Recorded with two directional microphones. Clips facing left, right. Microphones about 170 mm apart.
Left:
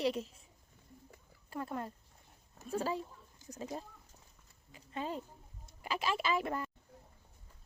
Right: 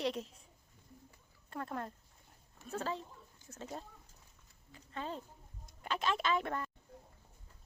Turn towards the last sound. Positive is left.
turn(degrees=5)  # may be behind; listen again after turning